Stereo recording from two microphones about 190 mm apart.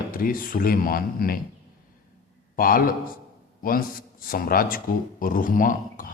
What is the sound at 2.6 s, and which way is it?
A man's voice, 50° left (ahead or behind).